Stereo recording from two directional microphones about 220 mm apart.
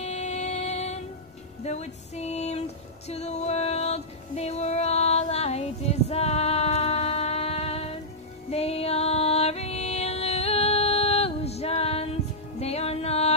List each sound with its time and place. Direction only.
0.0 s music: 30° left (ahead or behind)
3.1 s female singing: 30° left (ahead or behind)
8.5 s music: 30° left (ahead or behind)